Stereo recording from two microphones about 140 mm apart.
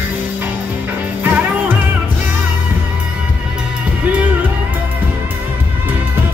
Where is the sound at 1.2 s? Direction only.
10° right (ahead or behind).